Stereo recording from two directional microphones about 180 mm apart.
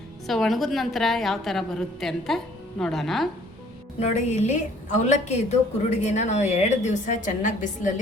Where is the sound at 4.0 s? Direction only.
40° left (ahead or behind).